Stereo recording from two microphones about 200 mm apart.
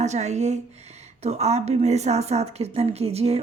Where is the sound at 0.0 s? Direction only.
35° right (ahead or behind).